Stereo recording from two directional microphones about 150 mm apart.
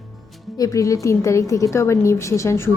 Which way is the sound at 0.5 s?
25° left (ahead or behind).